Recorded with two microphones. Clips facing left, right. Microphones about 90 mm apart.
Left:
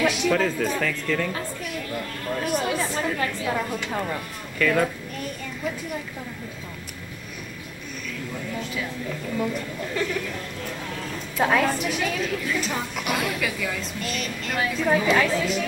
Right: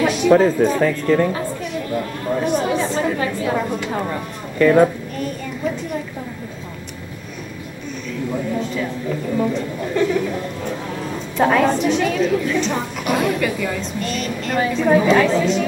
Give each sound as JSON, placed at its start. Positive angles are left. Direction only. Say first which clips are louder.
{"t": 0.0, "sound": "speech", "louder": "right 8 dB", "side_deg": -30}
{"t": 2.0, "sound": "a sound", "louder": "right 8 dB", "side_deg": -10}
{"t": 2.4, "sound": "chatter", "louder": "right 5 dB", "side_deg": 0}
{"t": 3.0, "sound": "a woman's voice", "louder": "right 6 dB", "side_deg": -15}
{"t": 4.6, "sound": "a woman's voice", "louder": "right 9 dB", "side_deg": -25}
{"t": 8.5, "sound": "a sound", "louder": "right 7 dB", "side_deg": 0}
{"t": 9.9, "sound": "speech", "louder": "right 9 dB", "side_deg": -10}
{"t": 11.3, "sound": "a woman's voice", "louder": "right 6 dB", "side_deg": 0}